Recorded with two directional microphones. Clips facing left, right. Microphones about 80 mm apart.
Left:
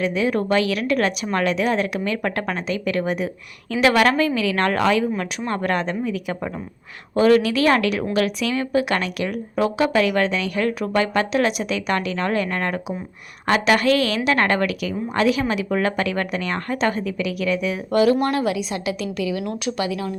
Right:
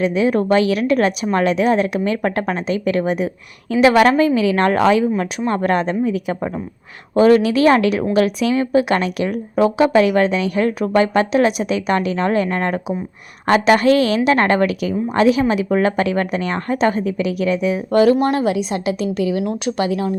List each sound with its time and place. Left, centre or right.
0.0 s speech: right